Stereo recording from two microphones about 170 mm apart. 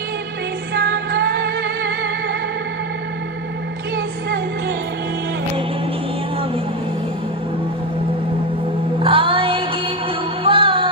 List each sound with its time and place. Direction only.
0.7 s music: 70° right (ahead or behind)
9.0 s music: 30° right (ahead or behind)